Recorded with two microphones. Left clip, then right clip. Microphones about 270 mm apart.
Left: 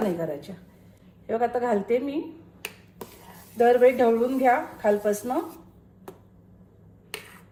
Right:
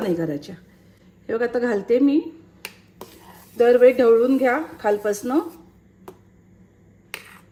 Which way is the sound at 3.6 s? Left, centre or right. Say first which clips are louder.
Right 4 dB; right.